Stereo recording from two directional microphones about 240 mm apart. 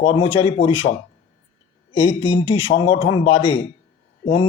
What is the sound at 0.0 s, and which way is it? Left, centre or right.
Speech, left.